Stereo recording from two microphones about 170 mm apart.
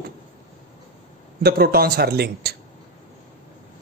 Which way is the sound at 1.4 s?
65° right (ahead or behind).